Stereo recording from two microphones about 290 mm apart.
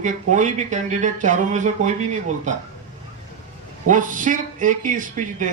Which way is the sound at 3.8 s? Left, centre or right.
Right.